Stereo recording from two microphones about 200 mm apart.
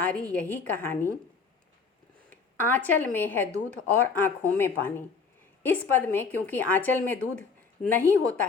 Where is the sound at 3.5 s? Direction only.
35° right (ahead or behind).